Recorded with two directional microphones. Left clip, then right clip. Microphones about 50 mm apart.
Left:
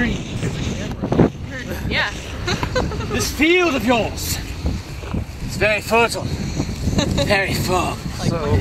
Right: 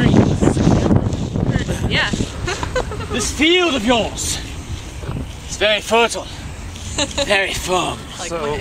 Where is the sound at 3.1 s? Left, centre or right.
Centre.